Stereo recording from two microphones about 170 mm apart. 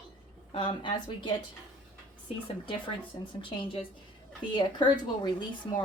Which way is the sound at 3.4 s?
30° left (ahead or behind).